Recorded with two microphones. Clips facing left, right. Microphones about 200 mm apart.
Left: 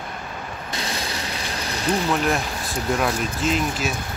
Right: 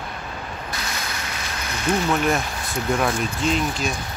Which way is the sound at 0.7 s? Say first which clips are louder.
Left 6 dB; 30° left (ahead or behind).